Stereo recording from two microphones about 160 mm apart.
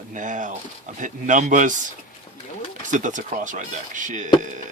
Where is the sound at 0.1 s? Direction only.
50° right (ahead or behind).